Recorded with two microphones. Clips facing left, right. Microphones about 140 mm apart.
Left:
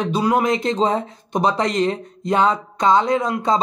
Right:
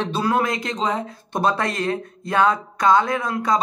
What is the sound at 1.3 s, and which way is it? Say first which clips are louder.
Speech: left 3 dB; 15° left (ahead or behind).